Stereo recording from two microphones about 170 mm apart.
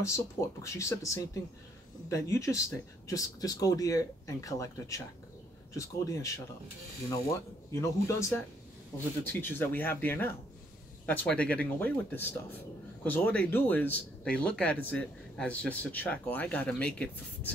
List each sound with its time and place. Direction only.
0.0 s speech: 15° left (ahead or behind)